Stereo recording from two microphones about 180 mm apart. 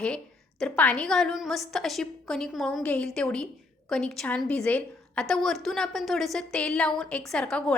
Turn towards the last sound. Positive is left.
turn(degrees=5)  # may be behind; listen again after turning